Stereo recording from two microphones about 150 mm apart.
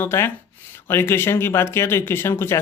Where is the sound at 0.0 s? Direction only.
15° left (ahead or behind).